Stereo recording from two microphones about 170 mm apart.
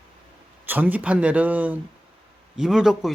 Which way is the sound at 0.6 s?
10° right (ahead or behind).